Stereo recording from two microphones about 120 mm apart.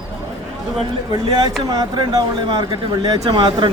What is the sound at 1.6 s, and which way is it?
Speech, 30° right (ahead or behind).